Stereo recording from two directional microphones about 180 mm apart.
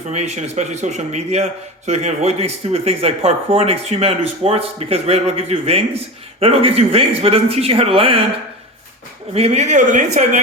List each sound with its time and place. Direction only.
0.1 s speech: 40° right (ahead or behind)
9.3 s speech: 35° right (ahead or behind)